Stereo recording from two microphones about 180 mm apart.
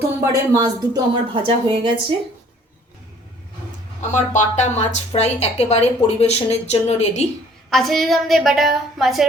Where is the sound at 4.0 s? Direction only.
40° left (ahead or behind).